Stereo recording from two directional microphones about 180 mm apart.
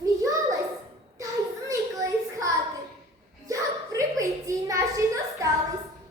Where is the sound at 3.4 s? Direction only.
20° right (ahead or behind).